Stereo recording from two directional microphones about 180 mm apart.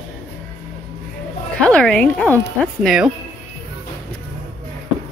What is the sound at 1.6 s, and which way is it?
Speech, 5° left (ahead or behind).